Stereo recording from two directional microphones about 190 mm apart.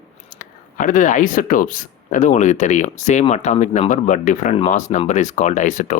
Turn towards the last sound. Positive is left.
turn(degrees=40)  # may be behind; listen again after turning